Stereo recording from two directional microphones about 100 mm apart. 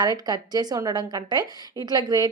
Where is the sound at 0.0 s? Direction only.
45° right (ahead or behind).